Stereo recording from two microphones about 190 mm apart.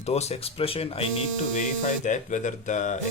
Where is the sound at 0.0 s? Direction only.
35° left (ahead or behind).